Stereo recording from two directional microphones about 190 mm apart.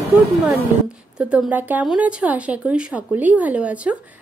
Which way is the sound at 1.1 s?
5° right (ahead or behind).